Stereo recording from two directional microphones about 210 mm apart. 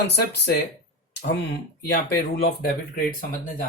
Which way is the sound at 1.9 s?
50° left (ahead or behind).